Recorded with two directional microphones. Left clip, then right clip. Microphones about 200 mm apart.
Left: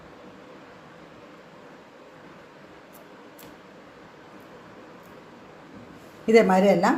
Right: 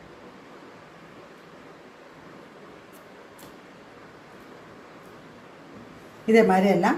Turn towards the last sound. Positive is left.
turn(degrees=30)  # may be behind; listen again after turning